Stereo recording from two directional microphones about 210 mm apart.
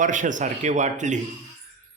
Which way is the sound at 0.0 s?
35° right (ahead or behind).